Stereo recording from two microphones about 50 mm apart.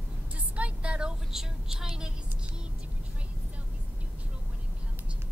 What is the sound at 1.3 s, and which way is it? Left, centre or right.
Vehicle, centre.